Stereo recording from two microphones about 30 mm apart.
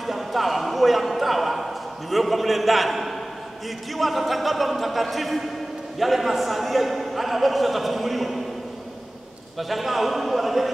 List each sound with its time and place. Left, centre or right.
0.0 s a sound: centre
3.9 s a man's voice: centre
9.6 s a man's voice: centre